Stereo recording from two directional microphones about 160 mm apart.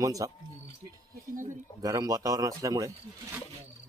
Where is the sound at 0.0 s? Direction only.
20° right (ahead or behind).